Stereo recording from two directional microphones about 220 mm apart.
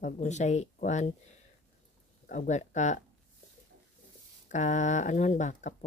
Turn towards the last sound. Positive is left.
turn(degrees=35)  # may be behind; listen again after turning